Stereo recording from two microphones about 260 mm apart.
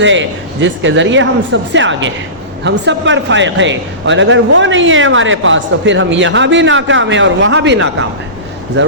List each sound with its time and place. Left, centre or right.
0.0 s a man's voice: right